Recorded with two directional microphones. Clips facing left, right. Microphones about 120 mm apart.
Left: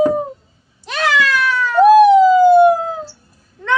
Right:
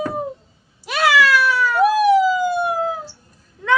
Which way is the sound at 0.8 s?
5° right (ahead or behind).